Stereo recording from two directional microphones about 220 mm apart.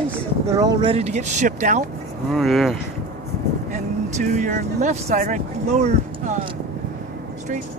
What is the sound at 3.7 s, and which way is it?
Speech, 35° right (ahead or behind).